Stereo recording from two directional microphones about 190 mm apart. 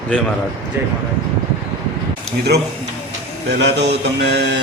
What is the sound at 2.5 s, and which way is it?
A man's voice, 60° right (ahead or behind).